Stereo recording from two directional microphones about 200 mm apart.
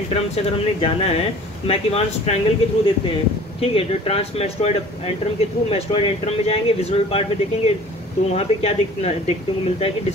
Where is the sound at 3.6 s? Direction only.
30° left (ahead or behind).